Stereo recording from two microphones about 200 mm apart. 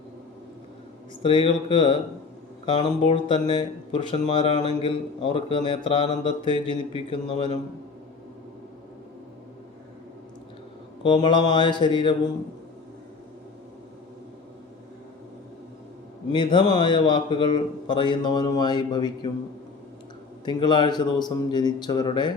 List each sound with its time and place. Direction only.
1.2 s speech: 25° left (ahead or behind)
11.0 s speech: 20° left (ahead or behind)
16.3 s speech: 25° left (ahead or behind)
20.4 s speech: 20° left (ahead or behind)